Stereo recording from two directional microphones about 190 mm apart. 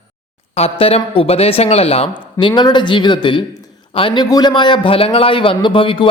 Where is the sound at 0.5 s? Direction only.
30° left (ahead or behind).